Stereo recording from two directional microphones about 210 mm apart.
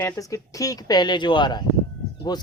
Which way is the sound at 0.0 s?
15° left (ahead or behind).